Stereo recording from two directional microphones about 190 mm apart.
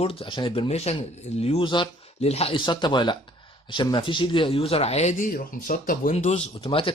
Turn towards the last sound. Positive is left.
turn(degrees=30)  # may be behind; listen again after turning